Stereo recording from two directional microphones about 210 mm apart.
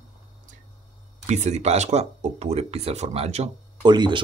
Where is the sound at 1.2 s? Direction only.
35° right (ahead or behind).